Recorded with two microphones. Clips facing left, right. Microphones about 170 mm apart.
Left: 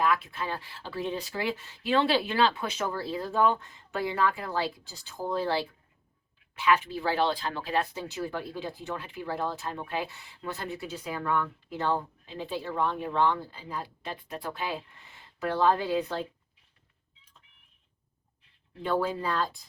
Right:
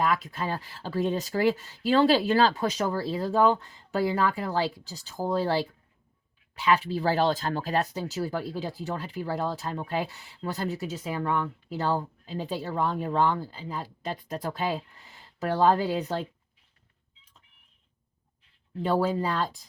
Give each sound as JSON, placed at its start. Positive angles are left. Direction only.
{"t": 0.0, "sound": "speech", "side_deg": -40}
{"t": 6.6, "sound": "speech", "side_deg": -35}
{"t": 18.8, "sound": "speech", "side_deg": -35}